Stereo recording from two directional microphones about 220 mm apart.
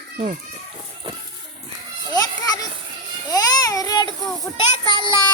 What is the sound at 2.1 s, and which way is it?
Children playing, 15° left (ahead or behind).